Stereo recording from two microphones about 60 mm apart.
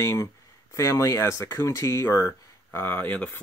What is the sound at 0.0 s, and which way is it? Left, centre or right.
Speech, left.